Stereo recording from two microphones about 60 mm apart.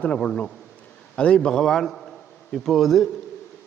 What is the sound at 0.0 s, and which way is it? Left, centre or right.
A man's voice, left.